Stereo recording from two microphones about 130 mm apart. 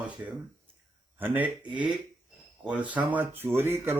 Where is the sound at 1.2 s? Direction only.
15° right (ahead or behind).